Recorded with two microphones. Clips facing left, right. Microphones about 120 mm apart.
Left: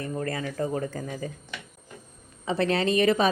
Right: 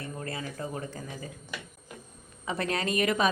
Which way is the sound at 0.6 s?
40° left (ahead or behind).